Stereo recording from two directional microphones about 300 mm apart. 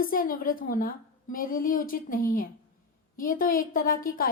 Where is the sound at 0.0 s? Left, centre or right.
Left.